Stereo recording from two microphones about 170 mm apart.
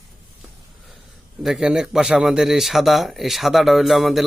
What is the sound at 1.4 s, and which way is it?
Speech, 5° right (ahead or behind).